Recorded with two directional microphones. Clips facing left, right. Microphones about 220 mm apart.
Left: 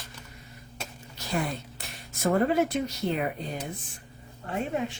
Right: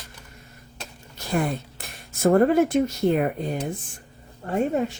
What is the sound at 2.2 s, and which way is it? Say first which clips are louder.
Speech: right 6 dB; 50° right (ahead or behind).